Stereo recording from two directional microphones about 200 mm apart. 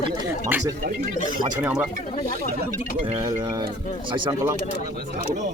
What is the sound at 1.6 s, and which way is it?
Speech, 10° right (ahead or behind).